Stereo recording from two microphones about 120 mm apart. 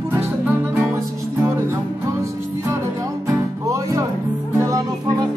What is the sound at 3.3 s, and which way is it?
Music, 30° right (ahead or behind).